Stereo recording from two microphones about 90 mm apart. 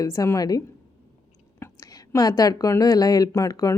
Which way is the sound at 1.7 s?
40° left (ahead or behind).